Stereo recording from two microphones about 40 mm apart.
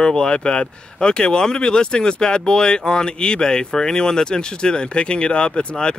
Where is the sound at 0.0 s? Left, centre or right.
Left.